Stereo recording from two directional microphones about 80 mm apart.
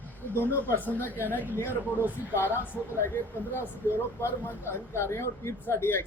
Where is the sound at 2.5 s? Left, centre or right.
Right.